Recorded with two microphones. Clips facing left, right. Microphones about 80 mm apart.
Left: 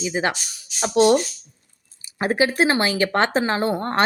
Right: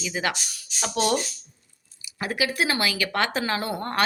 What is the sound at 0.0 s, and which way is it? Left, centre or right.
Speech, left.